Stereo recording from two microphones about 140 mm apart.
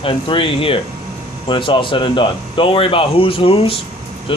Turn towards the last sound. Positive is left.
turn(degrees=40)  # may be behind; listen again after turning